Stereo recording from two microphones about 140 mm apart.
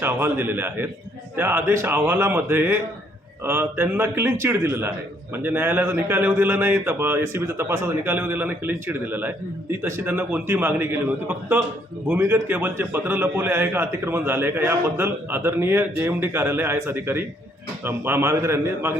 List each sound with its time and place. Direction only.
0.0 s a man's voice: 15° right (ahead or behind)